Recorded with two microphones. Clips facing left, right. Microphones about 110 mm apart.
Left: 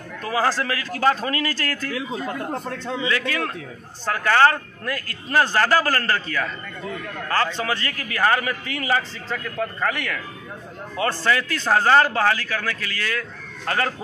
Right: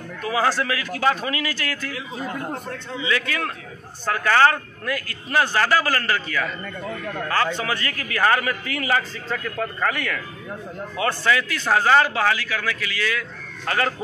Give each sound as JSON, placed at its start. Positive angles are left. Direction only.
{"t": 0.4, "sound": "a man's voice", "side_deg": 30}
{"t": 3.0, "sound": "a man's voice", "side_deg": 30}
{"t": 7.5, "sound": "a man's voice", "side_deg": 30}
{"t": 11.0, "sound": "a man's voice", "side_deg": 35}